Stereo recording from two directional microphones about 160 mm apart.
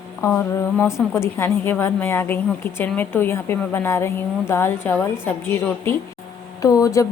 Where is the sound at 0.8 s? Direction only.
15° left (ahead or behind).